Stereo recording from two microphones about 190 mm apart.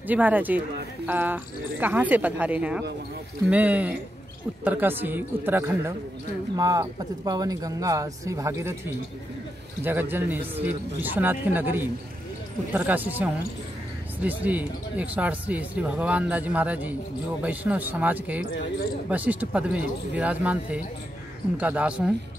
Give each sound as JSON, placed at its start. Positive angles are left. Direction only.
{"t": 0.0, "sound": "speech", "side_deg": -10}
{"t": 9.8, "sound": "speech", "side_deg": -10}